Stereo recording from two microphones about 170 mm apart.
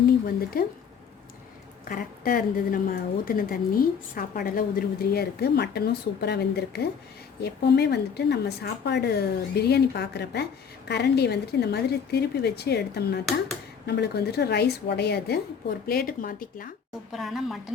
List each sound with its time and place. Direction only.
0.5 s a woman's voice: 60° left (ahead or behind)
1.9 s a woman's voice: 55° left (ahead or behind); by 15.4 s 75° left (ahead or behind)
15.9 s a woman's voice: 60° left (ahead or behind)
17.1 s a woman's voice: centre (ahead or behind)